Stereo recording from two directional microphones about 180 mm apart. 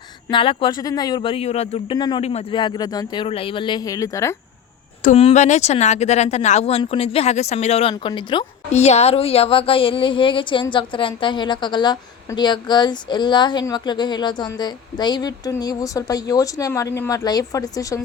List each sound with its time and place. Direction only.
0.3 s a woman's voice: 25° left (ahead or behind)
5.0 s speech: 35° left (ahead or behind)
8.7 s a woman's voice: 35° left (ahead or behind); by 18.0 s 20° left (ahead or behind)